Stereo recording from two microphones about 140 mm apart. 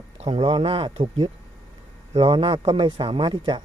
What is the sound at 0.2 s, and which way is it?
Speech, 40° right (ahead or behind).